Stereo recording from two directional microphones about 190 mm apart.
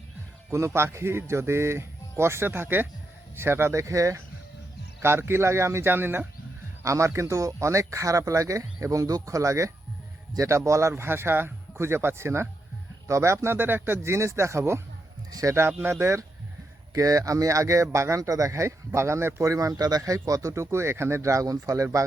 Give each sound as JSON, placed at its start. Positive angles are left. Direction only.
{"t": 0.5, "sound": "speech", "side_deg": -15}